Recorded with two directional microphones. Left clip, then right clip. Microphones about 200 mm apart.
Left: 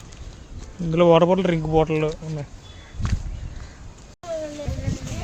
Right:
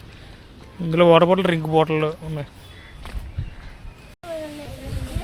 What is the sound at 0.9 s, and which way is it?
Speech, 5° left (ahead or behind).